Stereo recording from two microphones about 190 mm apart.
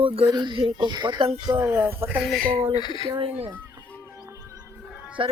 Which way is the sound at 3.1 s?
25° right (ahead or behind).